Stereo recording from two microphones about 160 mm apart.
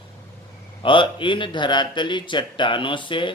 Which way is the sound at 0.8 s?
30° left (ahead or behind).